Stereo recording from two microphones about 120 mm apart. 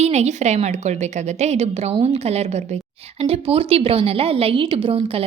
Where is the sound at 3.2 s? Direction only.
55° right (ahead or behind).